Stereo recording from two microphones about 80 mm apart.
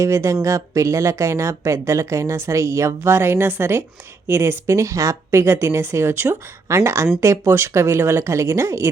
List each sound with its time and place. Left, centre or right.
0.0 s speech: right